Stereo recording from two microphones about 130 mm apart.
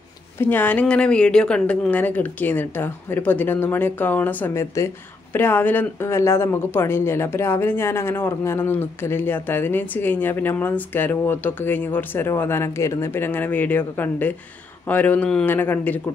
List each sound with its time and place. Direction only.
0.4 s speech: 15° left (ahead or behind)